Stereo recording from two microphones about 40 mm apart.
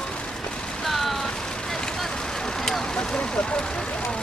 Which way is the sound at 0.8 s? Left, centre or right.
Centre.